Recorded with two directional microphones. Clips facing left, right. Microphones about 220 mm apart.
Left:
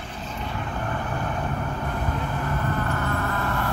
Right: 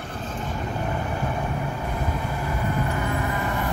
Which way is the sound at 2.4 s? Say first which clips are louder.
Right 2 dB; 10° right (ahead or behind).